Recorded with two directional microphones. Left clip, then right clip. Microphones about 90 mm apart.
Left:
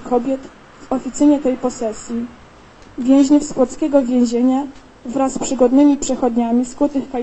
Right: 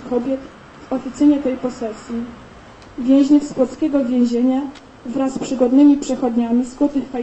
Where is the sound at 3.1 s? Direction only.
30° left (ahead or behind).